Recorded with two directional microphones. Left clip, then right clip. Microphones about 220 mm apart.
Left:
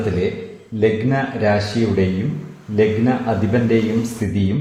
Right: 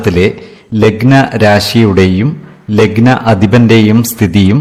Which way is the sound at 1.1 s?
45° right (ahead or behind).